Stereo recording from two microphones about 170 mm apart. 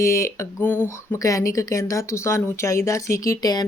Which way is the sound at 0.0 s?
15° left (ahead or behind).